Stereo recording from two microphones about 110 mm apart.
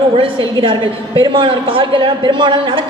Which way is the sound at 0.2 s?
50° right (ahead or behind).